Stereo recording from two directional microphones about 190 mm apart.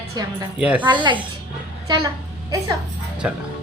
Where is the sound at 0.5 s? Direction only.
5° right (ahead or behind).